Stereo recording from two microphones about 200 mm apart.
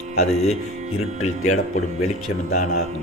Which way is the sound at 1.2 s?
40° left (ahead or behind).